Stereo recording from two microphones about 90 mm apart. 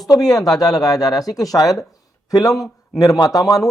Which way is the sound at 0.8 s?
45° left (ahead or behind).